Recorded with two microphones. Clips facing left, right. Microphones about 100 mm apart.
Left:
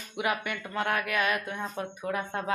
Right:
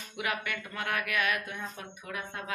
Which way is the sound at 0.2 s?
25° left (ahead or behind).